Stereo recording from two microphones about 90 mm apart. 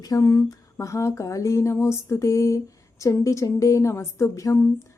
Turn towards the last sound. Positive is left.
turn(degrees=35)  # may be behind; listen again after turning